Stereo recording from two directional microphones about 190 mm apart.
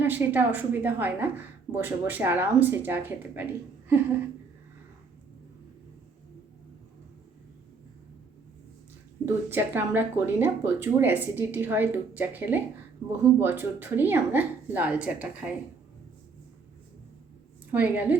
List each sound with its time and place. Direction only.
0.0 s speech: 10° right (ahead or behind)
9.2 s speech: 10° right (ahead or behind)
17.7 s speech: 10° right (ahead or behind)